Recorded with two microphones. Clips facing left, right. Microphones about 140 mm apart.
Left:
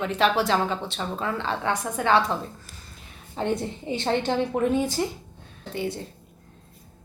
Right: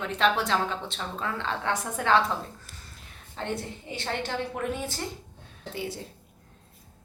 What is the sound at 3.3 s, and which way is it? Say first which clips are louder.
A woman's voice: left 6 dB; 20° left (ahead or behind).